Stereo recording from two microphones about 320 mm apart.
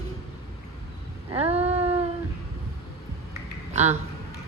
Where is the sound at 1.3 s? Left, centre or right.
Centre.